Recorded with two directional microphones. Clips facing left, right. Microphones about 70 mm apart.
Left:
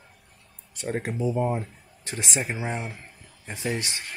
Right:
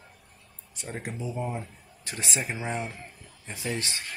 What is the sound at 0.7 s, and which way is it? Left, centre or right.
Speech, left.